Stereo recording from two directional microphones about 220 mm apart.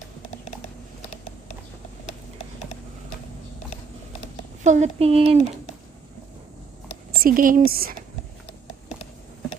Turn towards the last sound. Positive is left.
turn(degrees=-45)  # may be behind; listen again after turning